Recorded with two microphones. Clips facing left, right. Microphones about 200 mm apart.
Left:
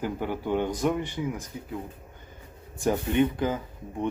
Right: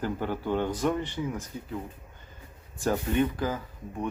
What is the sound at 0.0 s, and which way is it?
Speech, 15° left (ahead or behind).